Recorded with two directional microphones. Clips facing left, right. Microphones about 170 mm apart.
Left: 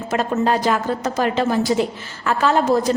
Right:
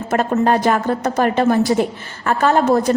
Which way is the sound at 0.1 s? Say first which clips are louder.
Right 3 dB; 55° right (ahead or behind).